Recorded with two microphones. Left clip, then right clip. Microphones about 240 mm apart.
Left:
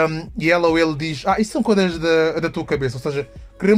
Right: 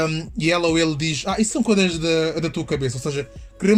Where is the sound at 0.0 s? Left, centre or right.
Left.